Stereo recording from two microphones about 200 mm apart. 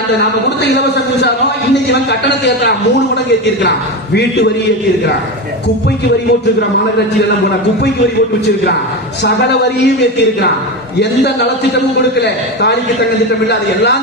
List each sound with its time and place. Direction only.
1.2 s a man's voice: 60° left (ahead or behind)
11.0 s a man's voice: 60° left (ahead or behind)